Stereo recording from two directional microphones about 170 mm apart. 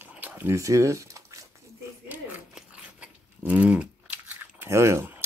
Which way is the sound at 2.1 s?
5° right (ahead or behind).